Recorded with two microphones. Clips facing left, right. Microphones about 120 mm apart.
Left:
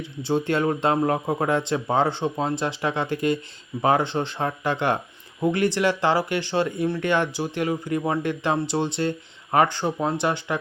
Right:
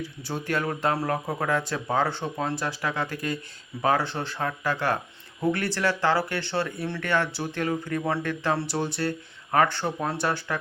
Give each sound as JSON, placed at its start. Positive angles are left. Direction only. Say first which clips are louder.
{"t": 0.0, "sound": "speech", "louder": "left 8 dB", "side_deg": 25}